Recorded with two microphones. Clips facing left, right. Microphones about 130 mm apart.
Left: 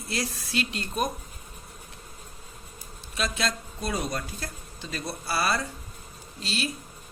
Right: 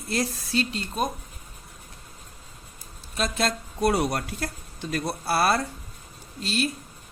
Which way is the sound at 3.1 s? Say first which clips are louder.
Right 3 dB; 50° right (ahead or behind).